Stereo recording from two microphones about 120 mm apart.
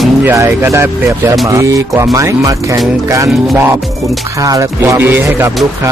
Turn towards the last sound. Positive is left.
turn(degrees=-20)  # may be behind; listen again after turning